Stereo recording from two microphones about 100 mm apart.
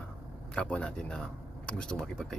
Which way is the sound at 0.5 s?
10° left (ahead or behind).